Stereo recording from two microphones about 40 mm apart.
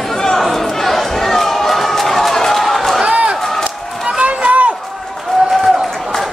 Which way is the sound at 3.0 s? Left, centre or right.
Right.